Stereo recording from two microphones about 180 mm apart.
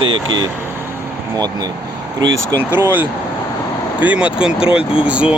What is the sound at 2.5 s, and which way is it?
Speech, 15° right (ahead or behind).